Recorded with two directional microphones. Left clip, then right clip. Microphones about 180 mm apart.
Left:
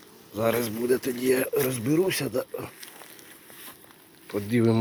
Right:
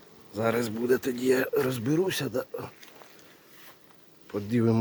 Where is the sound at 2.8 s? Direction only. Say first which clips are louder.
Left 5 dB; 55° left (ahead or behind).